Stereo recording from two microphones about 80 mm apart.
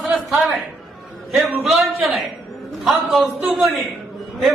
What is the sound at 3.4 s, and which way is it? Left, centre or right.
Speech, centre.